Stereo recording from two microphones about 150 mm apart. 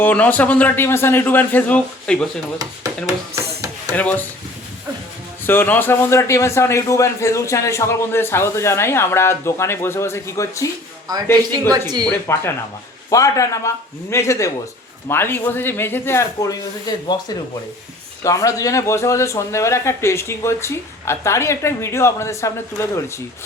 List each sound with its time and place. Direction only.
0.0 s a man's voice: 10° left (ahead or behind)
3.9 s a man's voice: 10° left (ahead or behind)
5.5 s a man's voice: 15° left (ahead or behind)
11.7 s speech: 30° right (ahead or behind)
12.0 s a man's voice: 15° left (ahead or behind)